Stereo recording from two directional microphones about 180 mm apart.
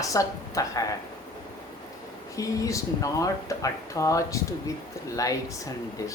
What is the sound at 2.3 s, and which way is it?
Speech, 15° left (ahead or behind).